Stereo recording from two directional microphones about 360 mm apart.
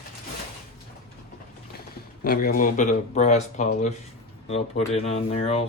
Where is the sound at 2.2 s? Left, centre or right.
Left.